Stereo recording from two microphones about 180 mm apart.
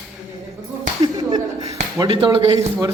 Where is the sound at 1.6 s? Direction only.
35° right (ahead or behind).